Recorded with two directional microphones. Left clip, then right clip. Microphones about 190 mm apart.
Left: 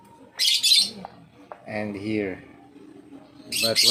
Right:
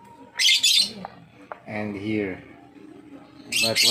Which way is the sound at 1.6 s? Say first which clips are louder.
Even; 10° right (ahead or behind).